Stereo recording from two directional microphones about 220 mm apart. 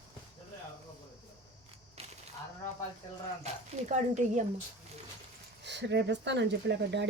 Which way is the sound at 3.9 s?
30° right (ahead or behind).